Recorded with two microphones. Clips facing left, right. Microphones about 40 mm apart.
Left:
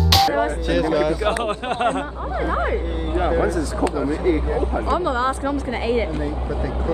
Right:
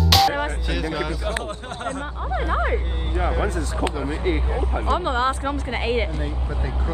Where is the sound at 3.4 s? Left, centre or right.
Right.